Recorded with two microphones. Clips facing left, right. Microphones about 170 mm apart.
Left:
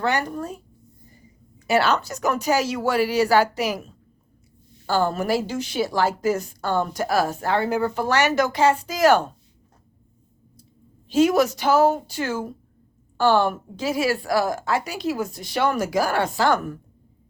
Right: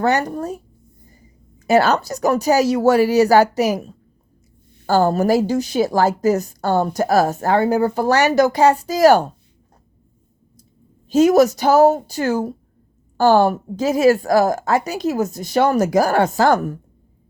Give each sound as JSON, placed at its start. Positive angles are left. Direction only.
{"t": 0.0, "sound": "a woman's voice", "side_deg": -40}
{"t": 11.1, "sound": "a woman's voice", "side_deg": -40}